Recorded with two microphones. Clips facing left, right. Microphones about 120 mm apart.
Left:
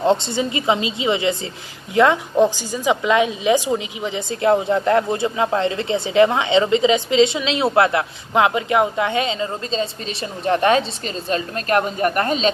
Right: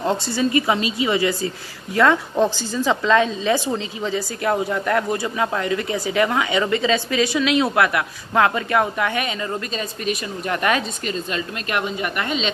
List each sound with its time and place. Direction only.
0.0 s a woman's voice: 25° left (ahead or behind); by 12.5 s 40° left (ahead or behind)